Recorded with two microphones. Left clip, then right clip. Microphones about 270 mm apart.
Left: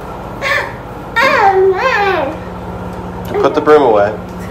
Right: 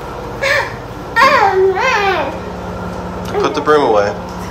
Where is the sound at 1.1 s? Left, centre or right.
Centre.